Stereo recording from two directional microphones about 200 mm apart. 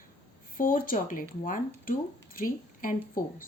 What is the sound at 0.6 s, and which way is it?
Speech, 45° left (ahead or behind).